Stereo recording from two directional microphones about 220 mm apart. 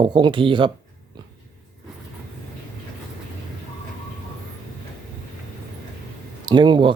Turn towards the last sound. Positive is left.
turn(degrees=-20)  # may be behind; listen again after turning